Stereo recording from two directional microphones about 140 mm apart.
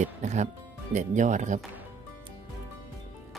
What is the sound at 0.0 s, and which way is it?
Speech, 55° right (ahead or behind).